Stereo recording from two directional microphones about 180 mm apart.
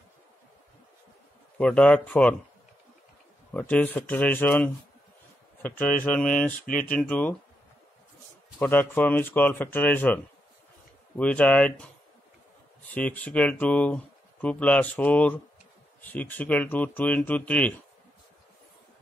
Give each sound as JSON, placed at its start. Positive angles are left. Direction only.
{"t": 1.6, "sound": "speech", "side_deg": 5}
{"t": 3.5, "sound": "speech", "side_deg": 10}
{"t": 8.5, "sound": "speech", "side_deg": 10}
{"t": 12.9, "sound": "speech", "side_deg": 10}